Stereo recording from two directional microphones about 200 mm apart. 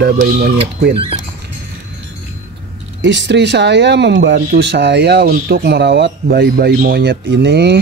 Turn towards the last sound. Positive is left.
turn(degrees=-55)  # may be behind; listen again after turning